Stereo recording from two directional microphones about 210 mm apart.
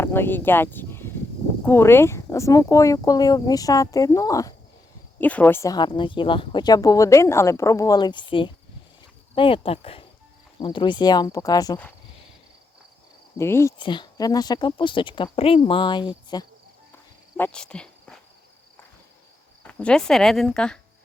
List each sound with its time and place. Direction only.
0.0 s speech: 10° left (ahead or behind)
13.4 s speech: 10° left (ahead or behind)
17.3 s speech: 5° left (ahead or behind)
19.6 s speech: 5° left (ahead or behind)